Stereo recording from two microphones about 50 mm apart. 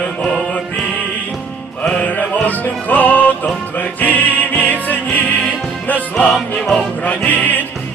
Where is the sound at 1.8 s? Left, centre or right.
Left.